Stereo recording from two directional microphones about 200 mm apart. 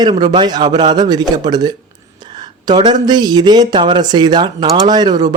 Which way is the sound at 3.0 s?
20° right (ahead or behind).